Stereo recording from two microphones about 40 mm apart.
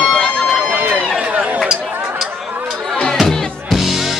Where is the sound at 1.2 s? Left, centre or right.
Right.